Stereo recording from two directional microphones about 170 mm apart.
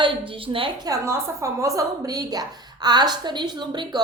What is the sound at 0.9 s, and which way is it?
A woman's voice, 15° right (ahead or behind).